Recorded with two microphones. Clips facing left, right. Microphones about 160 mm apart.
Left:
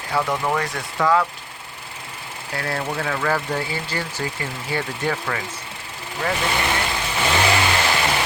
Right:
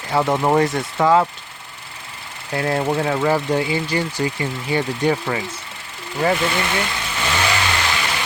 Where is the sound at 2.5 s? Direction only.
20° right (ahead or behind).